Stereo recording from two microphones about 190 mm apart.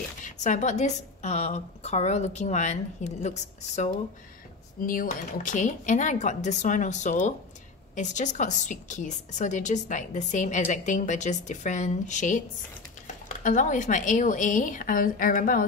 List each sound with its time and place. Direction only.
0.2 s a woman's voice: 40° left (ahead or behind)